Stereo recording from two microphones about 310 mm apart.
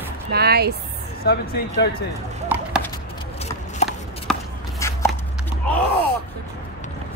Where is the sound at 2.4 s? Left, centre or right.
Centre.